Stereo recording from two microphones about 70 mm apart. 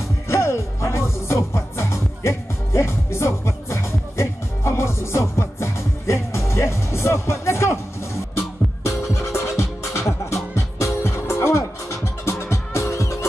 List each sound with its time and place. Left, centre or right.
0.3 s music: left